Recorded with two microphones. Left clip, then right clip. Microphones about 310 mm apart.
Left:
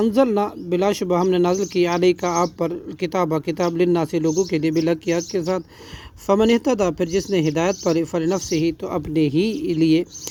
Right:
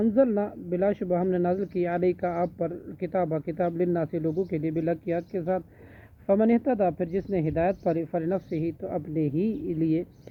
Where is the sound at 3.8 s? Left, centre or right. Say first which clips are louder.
Left 8 dB; left.